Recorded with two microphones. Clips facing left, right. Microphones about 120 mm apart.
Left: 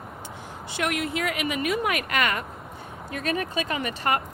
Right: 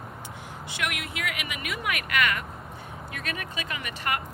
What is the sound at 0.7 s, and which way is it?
Speech, 35° left (ahead or behind).